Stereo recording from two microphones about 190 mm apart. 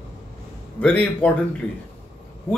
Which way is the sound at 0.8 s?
5° left (ahead or behind).